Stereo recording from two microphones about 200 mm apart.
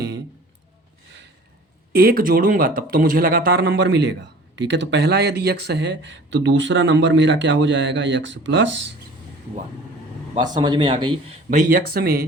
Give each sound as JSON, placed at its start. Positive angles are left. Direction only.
{"t": 1.9, "sound": "speech", "side_deg": -50}
{"t": 10.3, "sound": "speech", "side_deg": -20}
{"t": 11.5, "sound": "speech", "side_deg": -45}